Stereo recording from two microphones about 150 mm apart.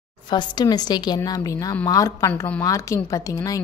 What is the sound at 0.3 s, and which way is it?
A woman's voice, 30° left (ahead or behind).